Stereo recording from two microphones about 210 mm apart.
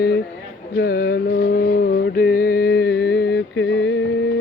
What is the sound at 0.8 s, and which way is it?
Mantra, 50° left (ahead or behind).